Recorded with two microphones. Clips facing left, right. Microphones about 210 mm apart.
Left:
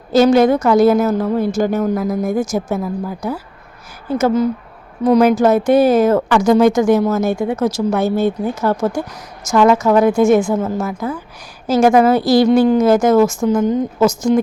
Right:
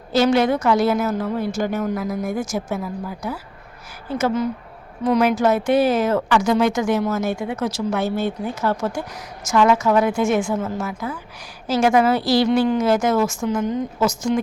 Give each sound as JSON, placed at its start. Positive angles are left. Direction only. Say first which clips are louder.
{"t": 0.1, "sound": "speech", "louder": "left 6 dB", "side_deg": 45}